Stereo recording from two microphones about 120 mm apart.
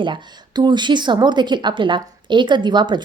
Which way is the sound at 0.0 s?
40° right (ahead or behind).